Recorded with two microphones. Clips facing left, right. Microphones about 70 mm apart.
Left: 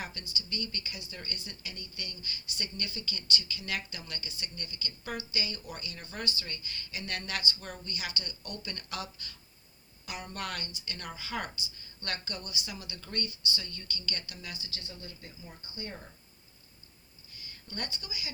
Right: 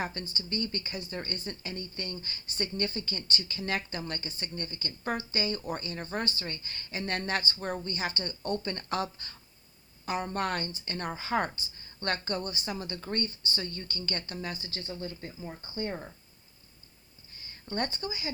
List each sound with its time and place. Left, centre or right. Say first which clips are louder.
0.0 s speech: right 6 dB; right
17.3 s speech: right 9 dB; right